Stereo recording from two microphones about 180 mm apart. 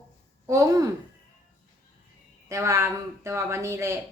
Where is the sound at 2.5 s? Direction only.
15° right (ahead or behind).